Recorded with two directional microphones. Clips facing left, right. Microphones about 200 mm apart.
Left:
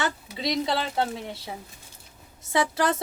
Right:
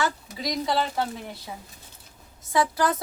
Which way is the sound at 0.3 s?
25° left (ahead or behind).